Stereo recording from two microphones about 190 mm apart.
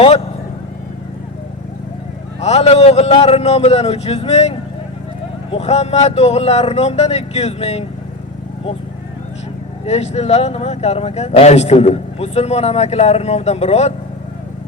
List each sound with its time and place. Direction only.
2.4 s speech: 35° left (ahead or behind)
9.8 s speech: 35° left (ahead or behind)